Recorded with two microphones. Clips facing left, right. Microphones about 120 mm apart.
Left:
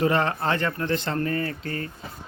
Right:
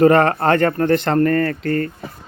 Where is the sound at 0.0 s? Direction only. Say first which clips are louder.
Right 10 dB; 55° right (ahead or behind).